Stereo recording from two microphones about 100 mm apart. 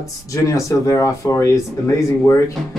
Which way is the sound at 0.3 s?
35° left (ahead or behind).